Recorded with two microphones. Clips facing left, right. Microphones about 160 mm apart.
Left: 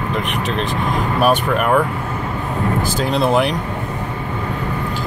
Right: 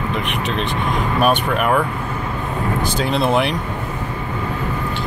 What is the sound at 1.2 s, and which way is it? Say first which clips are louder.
Speech: left 2 dB; centre (ahead or behind).